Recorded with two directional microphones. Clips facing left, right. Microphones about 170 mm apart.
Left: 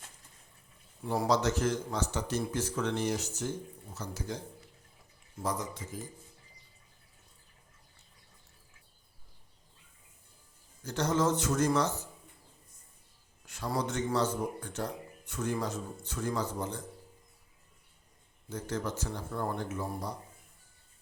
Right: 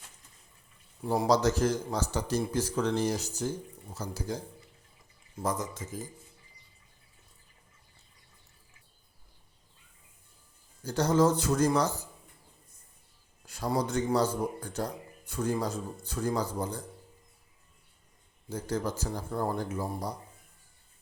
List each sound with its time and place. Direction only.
1.3 s speech: 35° right (ahead or behind)
5.4 s speech: 45° right (ahead or behind)
10.8 s speech: 35° right (ahead or behind)
13.5 s speech: 35° right (ahead or behind)
18.4 s speech: 35° right (ahead or behind)